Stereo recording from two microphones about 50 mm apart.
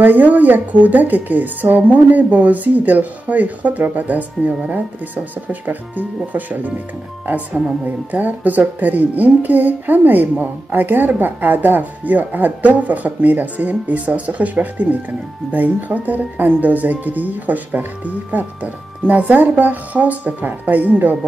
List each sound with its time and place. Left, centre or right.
0.0 s speech: right